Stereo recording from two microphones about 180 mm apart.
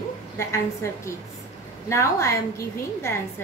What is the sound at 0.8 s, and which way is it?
A woman's voice, 15° left (ahead or behind).